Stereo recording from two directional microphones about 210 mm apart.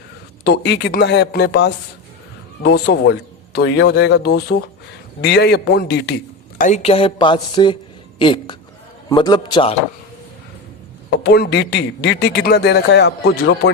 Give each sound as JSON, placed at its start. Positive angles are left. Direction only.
{"t": 0.4, "sound": "a man's voice", "side_deg": 55}
{"t": 6.6, "sound": "speech", "side_deg": 35}
{"t": 11.2, "sound": "a man's voice", "side_deg": 50}